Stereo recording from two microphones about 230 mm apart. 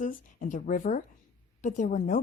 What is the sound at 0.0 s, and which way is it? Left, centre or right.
A woman's voice, left.